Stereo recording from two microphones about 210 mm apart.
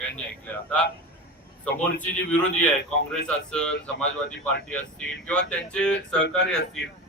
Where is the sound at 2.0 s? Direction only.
5° left (ahead or behind).